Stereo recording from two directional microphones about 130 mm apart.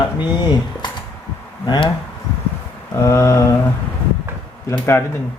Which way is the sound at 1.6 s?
35° left (ahead or behind).